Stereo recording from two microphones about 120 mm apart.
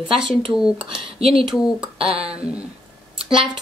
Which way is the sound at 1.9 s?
55° right (ahead or behind).